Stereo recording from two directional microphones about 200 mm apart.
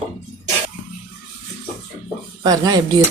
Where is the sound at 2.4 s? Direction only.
20° right (ahead or behind).